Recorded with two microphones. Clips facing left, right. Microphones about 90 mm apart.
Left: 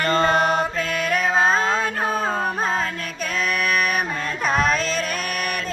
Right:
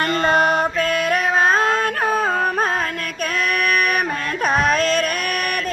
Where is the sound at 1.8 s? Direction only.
55° right (ahead or behind).